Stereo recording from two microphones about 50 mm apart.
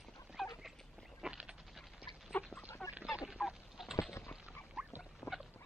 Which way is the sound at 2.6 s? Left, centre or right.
Left.